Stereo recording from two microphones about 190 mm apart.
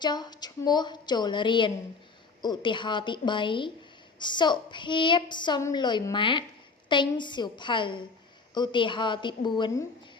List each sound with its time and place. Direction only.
0.0 s a woman's voice: 20° left (ahead or behind)